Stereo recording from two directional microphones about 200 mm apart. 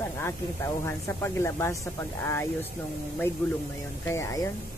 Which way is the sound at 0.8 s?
10° left (ahead or behind).